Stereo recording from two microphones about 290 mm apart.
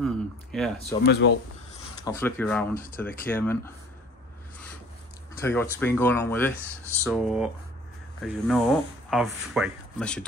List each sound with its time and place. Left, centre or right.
0.0 s speech: centre
0.7 s speech: left
2.0 s speech: centre
2.7 s speech: left
3.0 s speech: centre
5.4 s speech: centre